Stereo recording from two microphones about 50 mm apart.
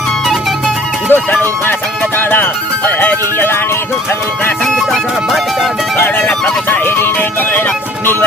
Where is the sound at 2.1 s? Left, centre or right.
Left.